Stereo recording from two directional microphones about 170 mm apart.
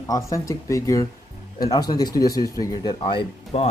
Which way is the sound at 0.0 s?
20° left (ahead or behind).